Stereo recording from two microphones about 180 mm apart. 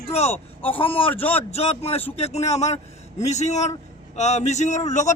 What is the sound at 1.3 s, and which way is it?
A man's voice, 35° left (ahead or behind).